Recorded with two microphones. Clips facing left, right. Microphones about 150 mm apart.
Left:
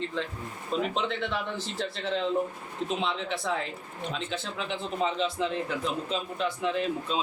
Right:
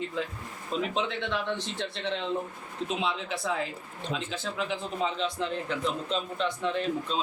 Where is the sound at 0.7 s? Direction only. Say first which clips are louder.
Left 1 dB; centre (ahead or behind).